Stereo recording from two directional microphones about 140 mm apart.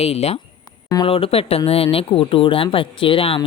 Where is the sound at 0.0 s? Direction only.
50° left (ahead or behind).